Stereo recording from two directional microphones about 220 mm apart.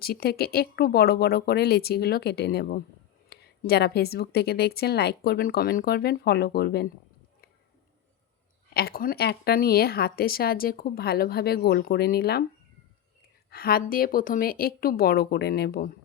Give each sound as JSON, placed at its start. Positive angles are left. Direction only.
{"t": 0.0, "sound": "speech", "side_deg": 45}
{"t": 8.7, "sound": "speech", "side_deg": 45}
{"t": 13.5, "sound": "speech", "side_deg": 45}